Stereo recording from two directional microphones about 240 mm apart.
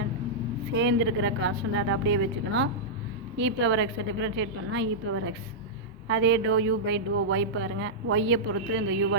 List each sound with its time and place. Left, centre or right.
0.7 s a woman's voice: right